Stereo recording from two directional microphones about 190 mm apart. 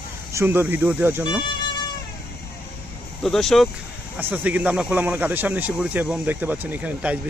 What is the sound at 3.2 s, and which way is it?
Speech, centre (ahead or behind).